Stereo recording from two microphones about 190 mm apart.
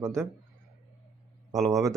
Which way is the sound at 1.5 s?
15° right (ahead or behind).